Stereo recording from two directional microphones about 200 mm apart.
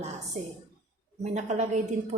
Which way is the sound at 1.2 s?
35° right (ahead or behind).